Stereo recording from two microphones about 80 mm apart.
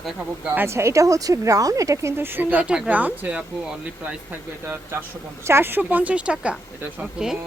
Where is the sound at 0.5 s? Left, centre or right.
Right.